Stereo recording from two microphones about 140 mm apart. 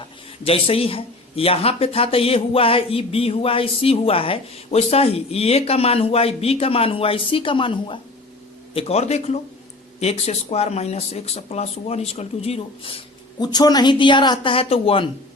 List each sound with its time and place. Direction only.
0.4 s speech: 45° left (ahead or behind)
13.4 s a woman's voice: 30° left (ahead or behind)